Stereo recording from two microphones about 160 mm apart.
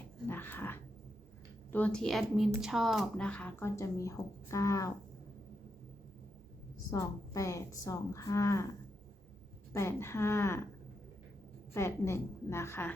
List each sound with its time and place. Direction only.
0.3 s speech: 10° left (ahead or behind)
6.9 s a woman's voice: 20° left (ahead or behind)
9.7 s speech: 15° left (ahead or behind)
11.7 s speech: 15° left (ahead or behind)